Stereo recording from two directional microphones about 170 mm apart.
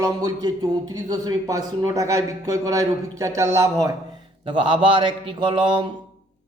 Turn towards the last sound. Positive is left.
turn(degrees=-30)  # may be behind; listen again after turning